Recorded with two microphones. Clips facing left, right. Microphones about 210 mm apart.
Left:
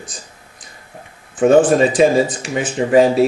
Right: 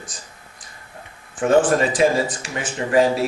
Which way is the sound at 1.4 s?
20° left (ahead or behind).